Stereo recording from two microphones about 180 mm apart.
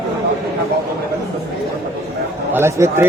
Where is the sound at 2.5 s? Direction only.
15° right (ahead or behind).